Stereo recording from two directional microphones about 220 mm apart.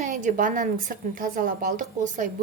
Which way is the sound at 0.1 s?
35° right (ahead or behind).